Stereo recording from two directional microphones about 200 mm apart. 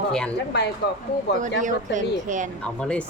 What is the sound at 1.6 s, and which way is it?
Speech, 40° right (ahead or behind).